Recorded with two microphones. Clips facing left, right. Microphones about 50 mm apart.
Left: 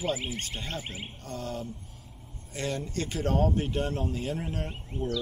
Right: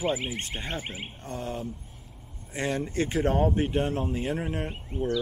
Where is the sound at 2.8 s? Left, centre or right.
Right.